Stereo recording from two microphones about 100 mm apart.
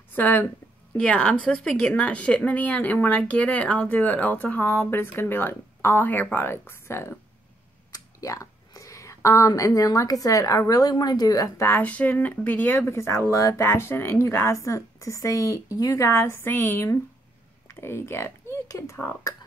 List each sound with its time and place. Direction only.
0.1 s speech: 20° left (ahead or behind)
7.9 s a sound: 35° left (ahead or behind)
9.5 s a woman's voice: 35° left (ahead or behind)